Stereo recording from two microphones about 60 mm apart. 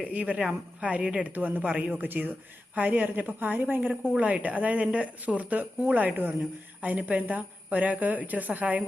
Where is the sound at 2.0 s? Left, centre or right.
Right.